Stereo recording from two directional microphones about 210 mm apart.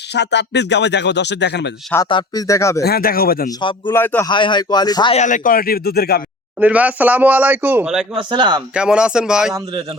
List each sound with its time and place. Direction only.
0.1 s speech: 55° left (ahead or behind)
2.0 s speech: 20° left (ahead or behind)
2.8 s speech: 45° left (ahead or behind)
3.6 s speech: 20° left (ahead or behind)
3.9 s speech: 10° left (ahead or behind)
4.3 s speech: 20° left (ahead or behind)
5.1 s speech: 35° left (ahead or behind)
6.6 s a man's voice: 5° right (ahead or behind)
8.1 s a man's voice: 20° right (ahead or behind)
8.7 s speech: 5° right (ahead or behind)